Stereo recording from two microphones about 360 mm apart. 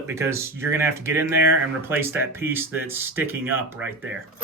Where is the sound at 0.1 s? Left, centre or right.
Centre.